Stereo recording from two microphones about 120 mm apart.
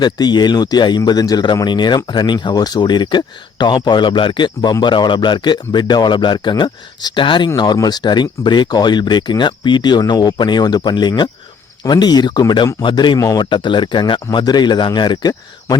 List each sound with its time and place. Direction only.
0.0 s speech: 35° left (ahead or behind)
13.1 s a man's voice: 25° left (ahead or behind)
13.4 s speech: 40° left (ahead or behind)